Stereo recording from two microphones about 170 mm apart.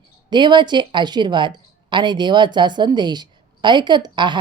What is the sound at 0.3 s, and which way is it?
A woman's voice, 25° right (ahead or behind).